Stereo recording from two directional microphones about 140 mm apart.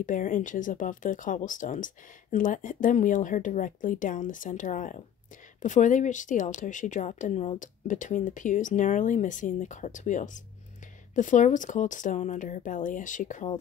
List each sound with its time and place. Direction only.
0.0 s speech: 70° left (ahead or behind)